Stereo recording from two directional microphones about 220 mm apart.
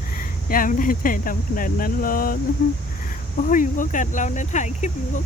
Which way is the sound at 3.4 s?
35° left (ahead or behind).